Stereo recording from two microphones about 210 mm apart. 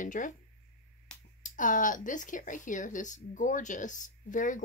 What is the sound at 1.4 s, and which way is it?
Speech, 40° left (ahead or behind).